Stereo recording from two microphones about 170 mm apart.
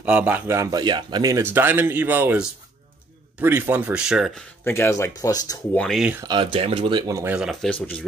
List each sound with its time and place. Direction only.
0.0 s speech: 10° right (ahead or behind)
4.6 s speech: 15° left (ahead or behind)
5.8 s speech: centre (ahead or behind)
6.2 s speech: 30° right (ahead or behind)
7.3 s speech: 5° right (ahead or behind)
7.7 s speech: 10° left (ahead or behind)